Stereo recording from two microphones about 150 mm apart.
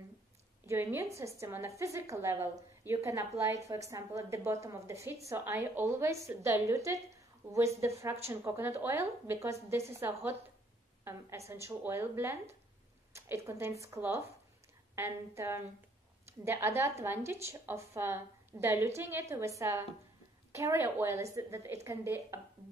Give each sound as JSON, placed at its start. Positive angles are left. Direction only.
{"t": 0.7, "sound": "a woman's voice", "side_deg": -15}